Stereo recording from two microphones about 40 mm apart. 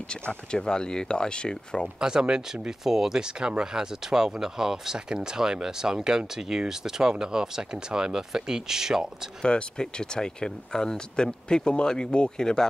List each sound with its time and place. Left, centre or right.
0.1 s speech: left
2.0 s speech: centre
9.4 s speech: left